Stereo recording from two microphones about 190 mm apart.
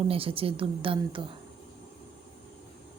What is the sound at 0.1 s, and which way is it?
A woman's voice, 30° right (ahead or behind).